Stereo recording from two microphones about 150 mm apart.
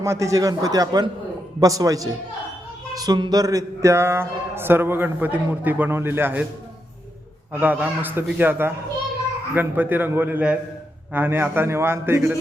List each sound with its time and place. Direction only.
0.0 s a man's voice: 20° right (ahead or behind)
7.6 s speech: 10° right (ahead or behind)